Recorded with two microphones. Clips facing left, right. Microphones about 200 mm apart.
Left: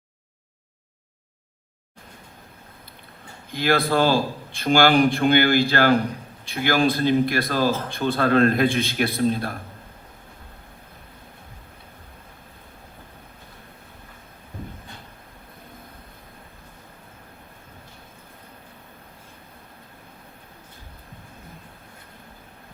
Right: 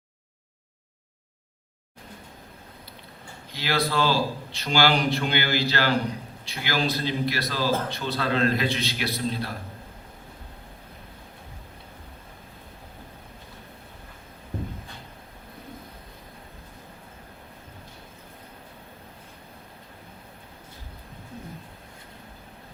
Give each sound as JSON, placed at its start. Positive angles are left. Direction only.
{"t": 3.5, "sound": "a man's voice", "side_deg": 50}